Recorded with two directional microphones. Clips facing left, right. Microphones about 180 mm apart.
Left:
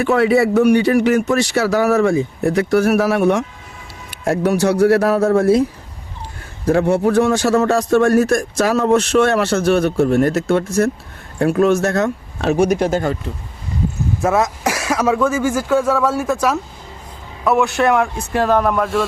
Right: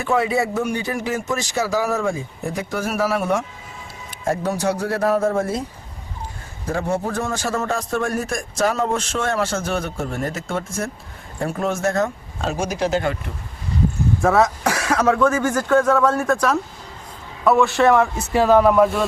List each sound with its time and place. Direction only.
0.0 s a man's voice: 70° left (ahead or behind)
6.7 s a man's voice: 70° left (ahead or behind); by 13.1 s 45° left (ahead or behind)
14.2 s a man's voice: 5° left (ahead or behind)